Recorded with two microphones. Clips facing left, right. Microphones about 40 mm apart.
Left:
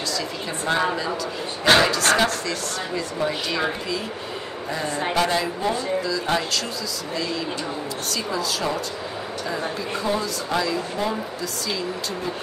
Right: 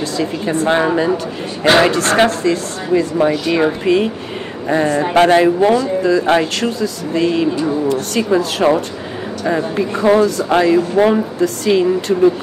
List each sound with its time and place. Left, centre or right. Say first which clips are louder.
0.2 s a man's voice: right 11 dB; right
10.0 s speech: right 14 dB; right